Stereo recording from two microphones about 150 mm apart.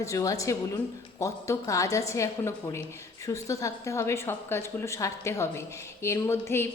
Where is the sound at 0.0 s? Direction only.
20° left (ahead or behind).